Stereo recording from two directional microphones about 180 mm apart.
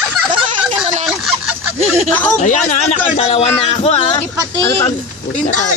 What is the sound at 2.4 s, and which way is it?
Speech, 45° left (ahead or behind).